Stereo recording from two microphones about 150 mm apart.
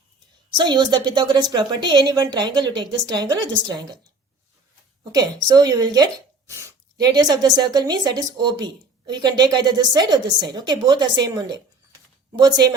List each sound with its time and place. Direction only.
0.5 s a woman's voice: 30° right (ahead or behind)
5.1 s a woman's voice: 25° right (ahead or behind)